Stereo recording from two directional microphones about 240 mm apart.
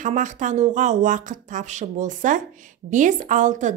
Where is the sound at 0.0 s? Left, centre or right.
Right.